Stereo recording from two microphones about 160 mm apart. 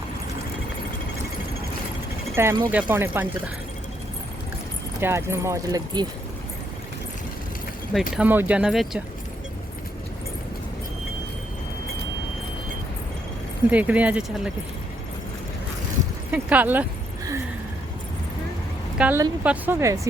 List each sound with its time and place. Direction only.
2.3 s speech: 15° right (ahead or behind)
4.9 s speech: 15° right (ahead or behind)
8.1 s speech: 10° right (ahead or behind)
13.7 s speech: 10° right (ahead or behind)
16.3 s speech: 10° right (ahead or behind)
18.9 s a woman's voice: 10° right (ahead or behind)